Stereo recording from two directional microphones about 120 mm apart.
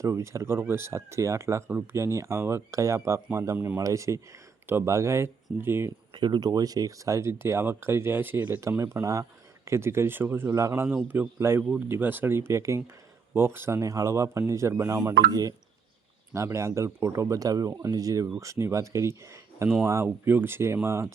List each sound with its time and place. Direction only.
0.0 s speech: 25° right (ahead or behind)
6.1 s a man's voice: 40° right (ahead or behind); by 21.1 s 20° right (ahead or behind)